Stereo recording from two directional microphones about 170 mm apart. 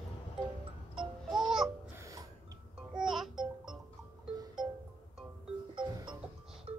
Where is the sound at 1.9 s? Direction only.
20° right (ahead or behind).